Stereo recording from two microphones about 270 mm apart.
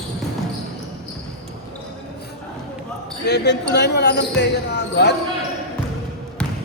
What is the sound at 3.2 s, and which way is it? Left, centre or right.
Speech, left.